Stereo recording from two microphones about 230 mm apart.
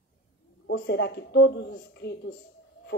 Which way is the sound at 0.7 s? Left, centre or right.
Left.